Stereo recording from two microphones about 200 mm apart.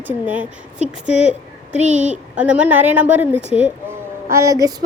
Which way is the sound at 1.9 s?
35° right (ahead or behind).